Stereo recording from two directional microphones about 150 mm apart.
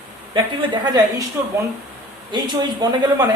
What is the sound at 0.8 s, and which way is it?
Speech, 25° right (ahead or behind).